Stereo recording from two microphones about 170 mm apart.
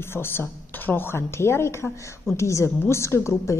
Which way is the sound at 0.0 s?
15° left (ahead or behind).